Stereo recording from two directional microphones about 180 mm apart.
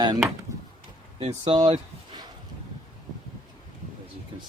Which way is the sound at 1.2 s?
30° right (ahead or behind).